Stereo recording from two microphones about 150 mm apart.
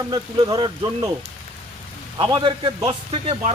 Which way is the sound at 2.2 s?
30° right (ahead or behind).